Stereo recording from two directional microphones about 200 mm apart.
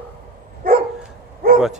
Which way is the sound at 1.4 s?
45° right (ahead or behind).